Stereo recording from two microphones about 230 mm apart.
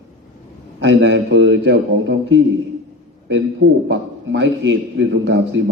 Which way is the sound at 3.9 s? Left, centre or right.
Right.